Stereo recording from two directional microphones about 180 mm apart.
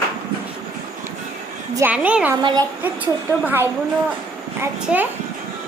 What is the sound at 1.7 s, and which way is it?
Speech, 10° right (ahead or behind).